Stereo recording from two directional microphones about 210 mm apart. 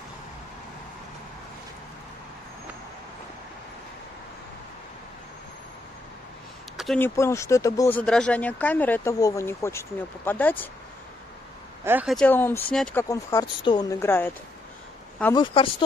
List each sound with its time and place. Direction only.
6.8 s a sound: centre (ahead or behind)
7.2 s speech: 15° left (ahead or behind)
11.8 s speech: 10° right (ahead or behind)
12.2 s speech: 10° left (ahead or behind)
13.1 s speech: 15° left (ahead or behind)
15.3 s speech: 25° left (ahead or behind)